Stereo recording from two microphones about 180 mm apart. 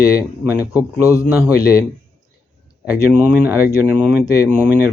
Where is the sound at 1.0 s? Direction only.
15° left (ahead or behind).